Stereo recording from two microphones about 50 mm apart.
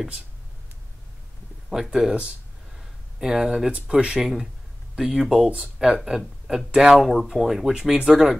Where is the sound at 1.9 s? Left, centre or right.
Centre.